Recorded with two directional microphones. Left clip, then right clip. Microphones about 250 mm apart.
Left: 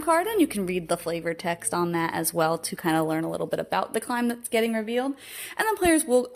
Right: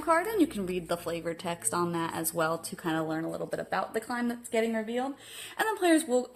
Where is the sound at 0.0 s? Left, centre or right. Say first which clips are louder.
Left 4 dB; left.